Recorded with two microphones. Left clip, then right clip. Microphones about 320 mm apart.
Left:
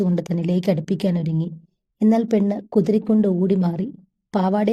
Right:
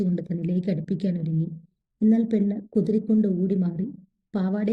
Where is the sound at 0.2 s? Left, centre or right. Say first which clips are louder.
Left 6 dB; centre.